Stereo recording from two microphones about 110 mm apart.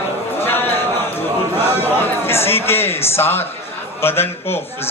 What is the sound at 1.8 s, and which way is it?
A man's voice, 20° left (ahead or behind).